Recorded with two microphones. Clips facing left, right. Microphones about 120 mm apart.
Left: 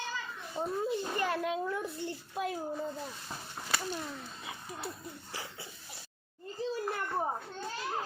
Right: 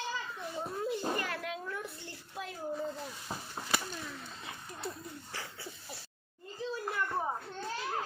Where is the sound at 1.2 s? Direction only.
20° left (ahead or behind).